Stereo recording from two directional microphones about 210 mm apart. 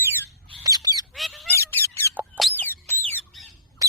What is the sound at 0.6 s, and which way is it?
Bird, 15° right (ahead or behind).